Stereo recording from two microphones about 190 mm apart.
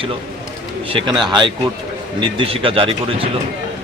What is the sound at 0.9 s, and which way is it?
A man's voice, 25° right (ahead or behind).